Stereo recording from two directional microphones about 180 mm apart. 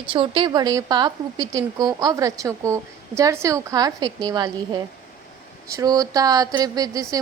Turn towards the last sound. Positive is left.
turn(degrees=-20)  # may be behind; listen again after turning